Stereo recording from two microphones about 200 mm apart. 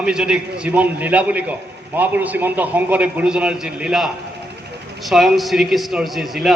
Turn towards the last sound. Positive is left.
turn(degrees=0)  # may be behind; listen again after turning